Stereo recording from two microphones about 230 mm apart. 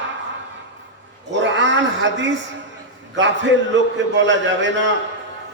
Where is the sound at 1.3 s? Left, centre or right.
Right.